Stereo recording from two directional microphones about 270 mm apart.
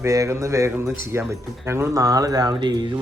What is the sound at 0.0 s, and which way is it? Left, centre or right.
Speech, centre.